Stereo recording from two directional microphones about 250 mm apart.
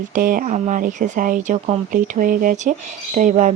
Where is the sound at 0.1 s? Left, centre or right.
Right.